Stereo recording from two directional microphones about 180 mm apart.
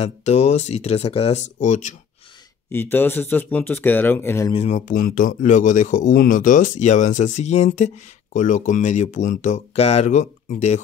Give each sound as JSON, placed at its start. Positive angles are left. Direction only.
{"t": 0.0, "sound": "speech", "side_deg": 40}
{"t": 2.7, "sound": "speech", "side_deg": 10}
{"t": 4.6, "sound": "speech", "side_deg": 40}